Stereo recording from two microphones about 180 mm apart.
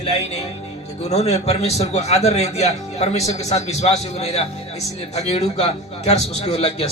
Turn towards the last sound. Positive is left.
turn(degrees=35)  # may be behind; listen again after turning